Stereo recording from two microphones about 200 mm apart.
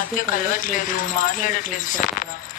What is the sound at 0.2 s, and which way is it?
Speech, 40° left (ahead or behind).